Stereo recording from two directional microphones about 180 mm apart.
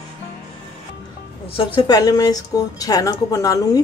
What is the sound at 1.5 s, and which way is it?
Speech, 30° left (ahead or behind).